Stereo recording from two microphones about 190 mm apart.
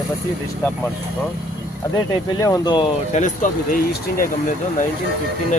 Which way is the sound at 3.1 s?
40° left (ahead or behind).